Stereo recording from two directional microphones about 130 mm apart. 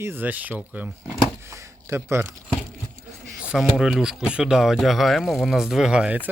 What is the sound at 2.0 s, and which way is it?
Speech, 20° right (ahead or behind).